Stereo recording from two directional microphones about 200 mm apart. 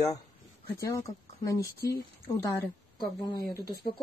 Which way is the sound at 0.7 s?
15° left (ahead or behind).